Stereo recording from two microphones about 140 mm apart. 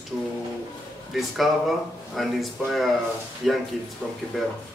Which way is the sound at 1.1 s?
Centre (ahead or behind).